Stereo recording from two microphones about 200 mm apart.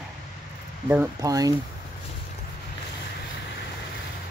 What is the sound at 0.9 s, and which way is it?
Speech, 10° right (ahead or behind).